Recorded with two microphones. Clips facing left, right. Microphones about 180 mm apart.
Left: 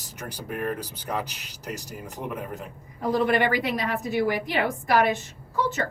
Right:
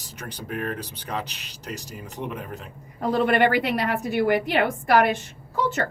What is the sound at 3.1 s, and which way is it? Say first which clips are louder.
A woman's voice: right 3 dB; 65° right (ahead or behind).